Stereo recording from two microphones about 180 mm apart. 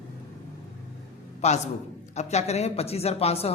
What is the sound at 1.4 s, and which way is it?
A man's voice, 40° left (ahead or behind).